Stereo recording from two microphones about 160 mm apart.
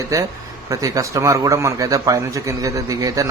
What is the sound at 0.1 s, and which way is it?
Speech, 20° right (ahead or behind).